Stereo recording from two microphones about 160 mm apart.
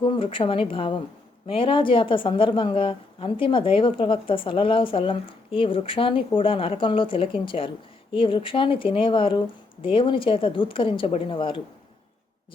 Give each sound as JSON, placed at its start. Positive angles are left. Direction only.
{"t": 0.0, "sound": "speech", "side_deg": 30}